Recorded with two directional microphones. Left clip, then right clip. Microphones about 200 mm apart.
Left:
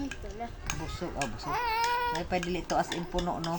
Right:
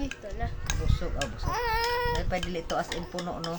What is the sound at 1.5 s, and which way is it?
Speech, 20° right (ahead or behind).